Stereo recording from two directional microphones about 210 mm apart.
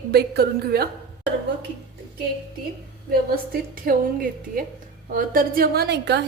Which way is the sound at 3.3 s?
45° right (ahead or behind).